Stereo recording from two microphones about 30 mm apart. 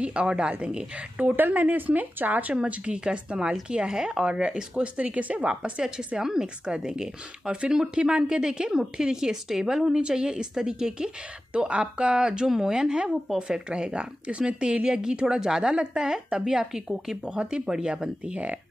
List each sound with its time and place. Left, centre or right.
0.0 s a woman's voice: right
1.2 s speech: right
2.5 s a woman's voice: right
5.0 s speech: right
5.5 s a woman's voice: right
9.9 s speech: right
11.5 s a woman's voice: right
12.4 s speech: centre
12.7 s speech: right
17.4 s a woman's voice: right
17.6 s speech: right
18.3 s speech: right